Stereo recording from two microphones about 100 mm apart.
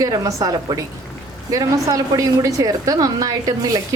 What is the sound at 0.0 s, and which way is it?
A woman's voice, 35° right (ahead or behind).